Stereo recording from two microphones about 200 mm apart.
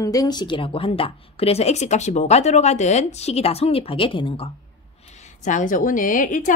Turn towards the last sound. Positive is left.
turn(degrees=40)  # may be behind; listen again after turning